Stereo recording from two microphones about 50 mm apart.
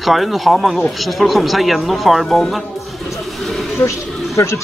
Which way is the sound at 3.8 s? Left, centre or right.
Left.